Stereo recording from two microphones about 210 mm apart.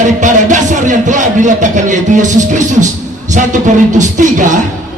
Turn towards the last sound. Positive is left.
turn(degrees=-35)  # may be behind; listen again after turning